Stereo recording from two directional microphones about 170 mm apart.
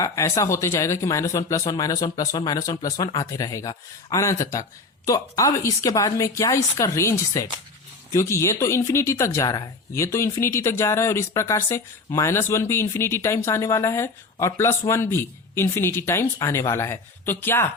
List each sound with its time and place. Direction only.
0.0 s speech: 20° left (ahead or behind)